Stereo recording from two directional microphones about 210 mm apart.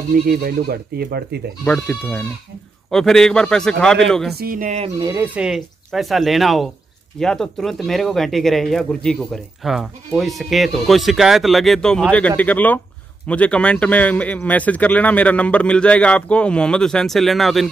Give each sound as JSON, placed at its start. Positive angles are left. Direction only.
{"t": 0.1, "sound": "speech", "side_deg": -45}
{"t": 1.6, "sound": "speech", "side_deg": 5}
{"t": 4.4, "sound": "speech", "side_deg": -40}
{"t": 4.9, "sound": "speech", "side_deg": -15}